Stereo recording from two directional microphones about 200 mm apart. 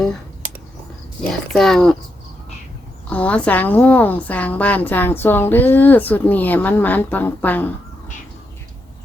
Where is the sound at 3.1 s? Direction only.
5° left (ahead or behind).